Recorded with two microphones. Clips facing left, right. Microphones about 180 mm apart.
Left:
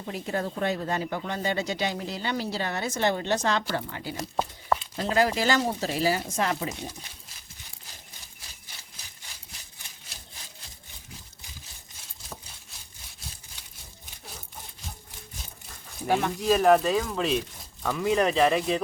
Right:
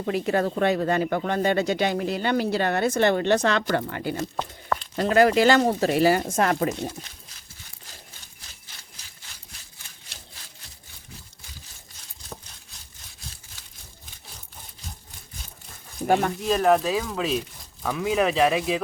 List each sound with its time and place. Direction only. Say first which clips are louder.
0.0 s speech: right 7 dB; 75° right (ahead or behind); by 6.9 s 55° right (ahead or behind)
16.0 s speech: right 4 dB; 50° right (ahead or behind)
16.4 s speech: even; centre (ahead or behind)